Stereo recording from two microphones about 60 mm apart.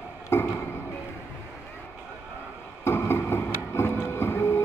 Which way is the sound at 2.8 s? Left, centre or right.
Left.